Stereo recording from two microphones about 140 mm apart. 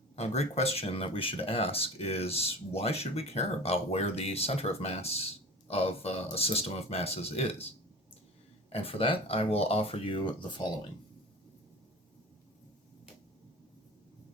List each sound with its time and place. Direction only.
0.2 s speech: 50° left (ahead or behind)
8.7 s speech: 45° left (ahead or behind)